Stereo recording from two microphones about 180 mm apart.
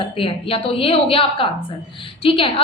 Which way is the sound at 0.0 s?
30° left (ahead or behind).